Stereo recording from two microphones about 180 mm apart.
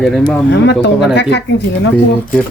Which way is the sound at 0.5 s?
75° left (ahead or behind).